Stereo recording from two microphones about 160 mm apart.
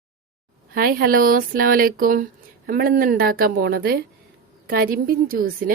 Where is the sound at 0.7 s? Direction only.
70° right (ahead or behind).